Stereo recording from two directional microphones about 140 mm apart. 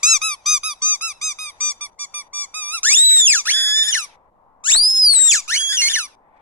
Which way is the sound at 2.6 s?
10° left (ahead or behind).